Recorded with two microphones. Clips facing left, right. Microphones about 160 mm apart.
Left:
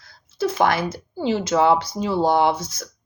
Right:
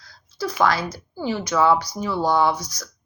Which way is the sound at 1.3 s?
25° left (ahead or behind).